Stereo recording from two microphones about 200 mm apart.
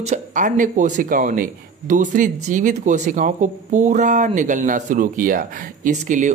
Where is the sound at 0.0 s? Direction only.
35° right (ahead or behind).